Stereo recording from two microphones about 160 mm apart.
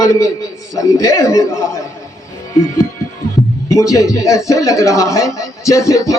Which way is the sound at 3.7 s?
20° left (ahead or behind).